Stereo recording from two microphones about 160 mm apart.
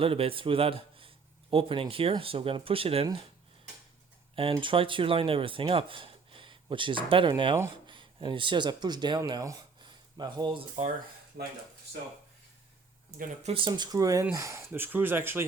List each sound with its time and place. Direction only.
0.0 s a man's voice: 35° right (ahead or behind)
4.4 s speech: 35° right (ahead or behind)
13.4 s speech: 35° right (ahead or behind); by 15.4 s 15° right (ahead or behind)